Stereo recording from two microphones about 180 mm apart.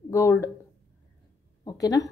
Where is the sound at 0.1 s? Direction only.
15° left (ahead or behind).